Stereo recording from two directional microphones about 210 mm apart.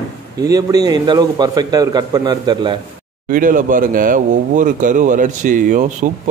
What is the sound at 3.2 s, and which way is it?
Speech, 40° right (ahead or behind).